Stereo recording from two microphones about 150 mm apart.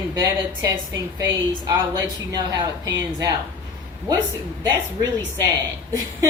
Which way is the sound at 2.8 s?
20° right (ahead or behind).